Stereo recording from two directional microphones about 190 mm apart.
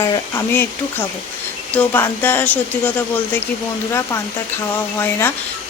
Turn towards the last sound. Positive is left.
turn(degrees=10)  # may be behind; listen again after turning